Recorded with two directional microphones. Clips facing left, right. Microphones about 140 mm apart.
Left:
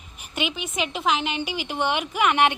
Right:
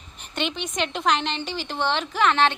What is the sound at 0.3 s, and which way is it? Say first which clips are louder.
A woman's voice: right 1 dB; 5° left (ahead or behind).